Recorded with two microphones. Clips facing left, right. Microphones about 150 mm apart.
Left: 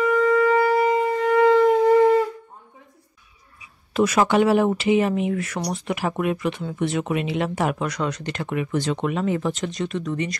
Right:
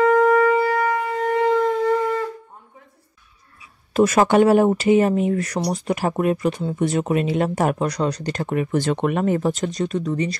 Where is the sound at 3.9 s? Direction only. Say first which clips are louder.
Right 3 dB; 45° right (ahead or behind).